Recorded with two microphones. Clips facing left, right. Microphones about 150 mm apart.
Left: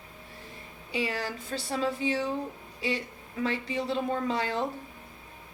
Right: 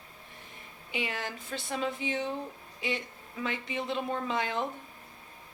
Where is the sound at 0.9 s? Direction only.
35° left (ahead or behind).